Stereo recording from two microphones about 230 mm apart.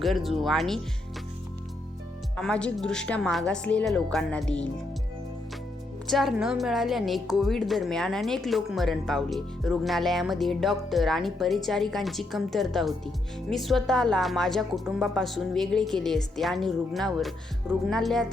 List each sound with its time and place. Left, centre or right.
0.0 s a woman's voice: centre
2.3 s a woman's voice: centre
6.1 s a woman's voice: centre